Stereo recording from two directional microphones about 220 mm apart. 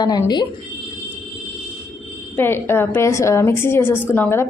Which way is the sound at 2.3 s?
10° left (ahead or behind).